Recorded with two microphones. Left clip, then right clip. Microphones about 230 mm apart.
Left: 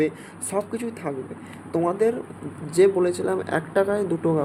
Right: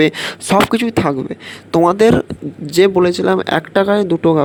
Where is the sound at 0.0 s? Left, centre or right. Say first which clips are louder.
Right 11 dB; right.